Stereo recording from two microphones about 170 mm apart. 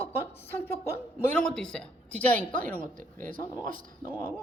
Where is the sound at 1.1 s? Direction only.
10° left (ahead or behind).